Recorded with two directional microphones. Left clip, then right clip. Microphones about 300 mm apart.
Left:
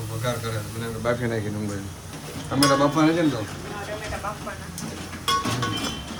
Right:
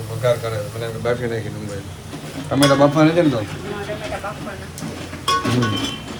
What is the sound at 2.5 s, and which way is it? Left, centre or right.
Stir, centre.